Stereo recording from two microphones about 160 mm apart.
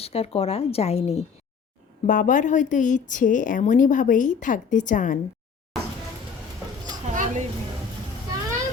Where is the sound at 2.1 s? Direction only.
55° left (ahead or behind).